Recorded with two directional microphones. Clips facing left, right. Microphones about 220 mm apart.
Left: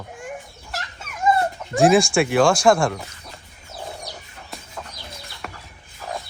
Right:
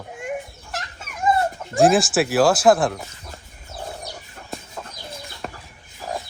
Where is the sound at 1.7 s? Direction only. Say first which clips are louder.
Left 1 dB; centre (ahead or behind).